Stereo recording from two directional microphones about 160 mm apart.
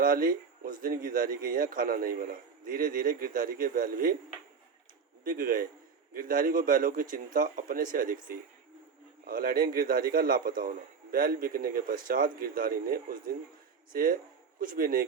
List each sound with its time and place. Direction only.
0.0 s a man's voice: 60° right (ahead or behind)
5.2 s a man's voice: 60° right (ahead or behind)